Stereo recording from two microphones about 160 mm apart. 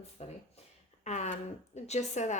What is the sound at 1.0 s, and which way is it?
Speech, 45° left (ahead or behind).